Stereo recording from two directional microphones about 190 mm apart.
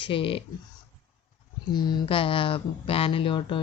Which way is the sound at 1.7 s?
20° left (ahead or behind).